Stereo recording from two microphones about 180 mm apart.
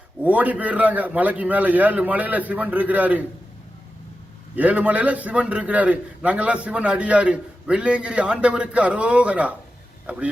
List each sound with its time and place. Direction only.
0.2 s a man's voice: 10° right (ahead or behind)
4.5 s a man's voice: 10° right (ahead or behind)